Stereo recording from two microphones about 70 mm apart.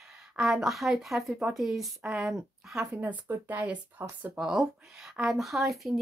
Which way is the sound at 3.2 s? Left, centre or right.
Right.